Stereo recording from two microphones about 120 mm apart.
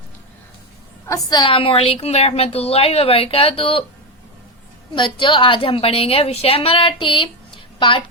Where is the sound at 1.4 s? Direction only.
45° left (ahead or behind).